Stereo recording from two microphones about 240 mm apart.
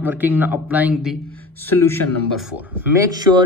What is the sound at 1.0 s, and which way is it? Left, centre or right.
A man's voice, centre.